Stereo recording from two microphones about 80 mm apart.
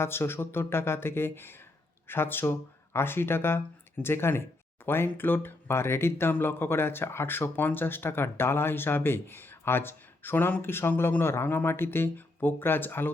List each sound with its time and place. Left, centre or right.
0.0 s speech: left